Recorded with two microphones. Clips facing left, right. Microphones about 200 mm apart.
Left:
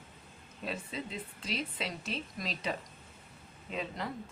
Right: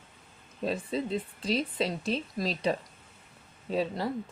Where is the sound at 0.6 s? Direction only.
35° right (ahead or behind).